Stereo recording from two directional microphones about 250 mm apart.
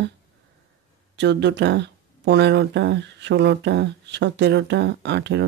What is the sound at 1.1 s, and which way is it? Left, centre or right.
Speech, right.